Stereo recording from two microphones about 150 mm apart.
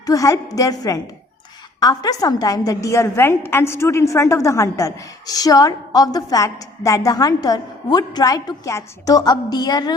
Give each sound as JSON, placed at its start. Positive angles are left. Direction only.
{"t": 0.0, "sound": "a woman's voice", "side_deg": 20}